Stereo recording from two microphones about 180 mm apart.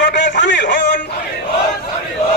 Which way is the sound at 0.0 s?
80° left.